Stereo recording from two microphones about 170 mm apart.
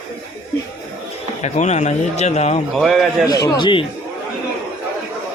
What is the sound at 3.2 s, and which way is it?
Speech, 20° left (ahead or behind).